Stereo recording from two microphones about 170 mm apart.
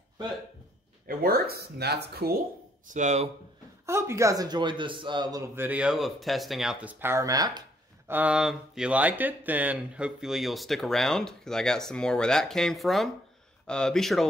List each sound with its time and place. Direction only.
1.0 s speech: 60° right (ahead or behind)
2.9 s speech: 45° right (ahead or behind)
3.8 s a man's voice: 15° right (ahead or behind)
8.1 s speech: 10° right (ahead or behind)